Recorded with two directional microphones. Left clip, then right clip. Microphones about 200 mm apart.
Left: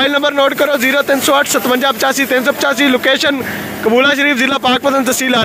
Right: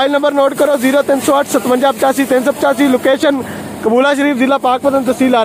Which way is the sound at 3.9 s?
25° right (ahead or behind).